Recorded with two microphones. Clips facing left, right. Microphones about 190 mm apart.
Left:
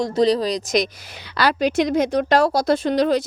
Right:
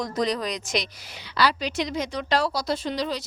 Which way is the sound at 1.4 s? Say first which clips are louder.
Left 6 dB; 50° left (ahead or behind).